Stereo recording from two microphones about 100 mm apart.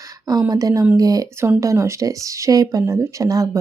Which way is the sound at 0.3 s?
40° right (ahead or behind).